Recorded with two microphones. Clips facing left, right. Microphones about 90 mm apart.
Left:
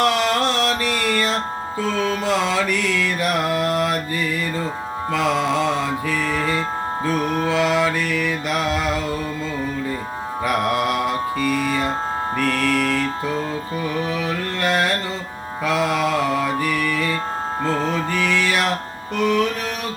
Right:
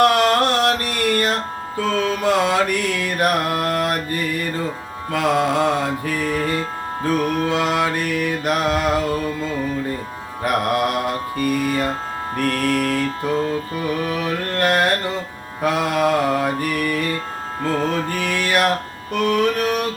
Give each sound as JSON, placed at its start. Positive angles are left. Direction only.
{"t": 0.0, "sound": "music", "side_deg": -55}
{"t": 6.4, "sound": "music", "side_deg": 60}
{"t": 7.5, "sound": "music", "side_deg": -55}
{"t": 11.4, "sound": "music", "side_deg": 55}
{"t": 14.5, "sound": "music", "side_deg": -55}
{"t": 15.6, "sound": "mantra", "side_deg": -50}
{"t": 18.1, "sound": "music", "side_deg": -50}
{"t": 19.2, "sound": "carnatic music", "side_deg": -55}